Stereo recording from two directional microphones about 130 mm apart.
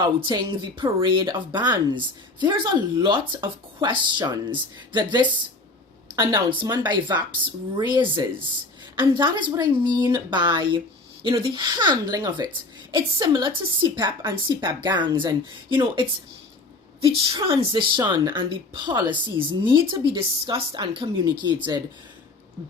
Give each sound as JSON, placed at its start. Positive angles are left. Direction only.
{"t": 0.2, "sound": "speech", "side_deg": -40}